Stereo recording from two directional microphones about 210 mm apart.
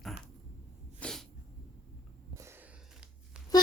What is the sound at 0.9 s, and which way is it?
Sneeze, 5° left (ahead or behind).